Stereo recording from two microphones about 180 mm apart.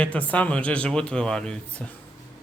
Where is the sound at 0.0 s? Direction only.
10° left (ahead or behind).